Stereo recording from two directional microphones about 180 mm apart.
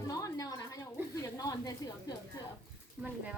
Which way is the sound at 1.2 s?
20° left (ahead or behind).